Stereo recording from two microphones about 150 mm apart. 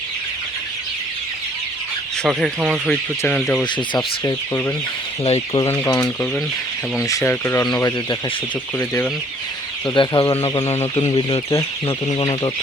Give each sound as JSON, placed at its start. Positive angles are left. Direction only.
{"t": 2.2, "sound": "speech", "side_deg": -5}
{"t": 2.9, "sound": "speech", "side_deg": 10}
{"t": 3.9, "sound": "speech", "side_deg": 25}
{"t": 5.2, "sound": "speech", "side_deg": 40}
{"t": 5.6, "sound": "speech", "side_deg": 15}
{"t": 7.1, "sound": "speech", "side_deg": 20}
{"t": 9.8, "sound": "speech", "side_deg": 30}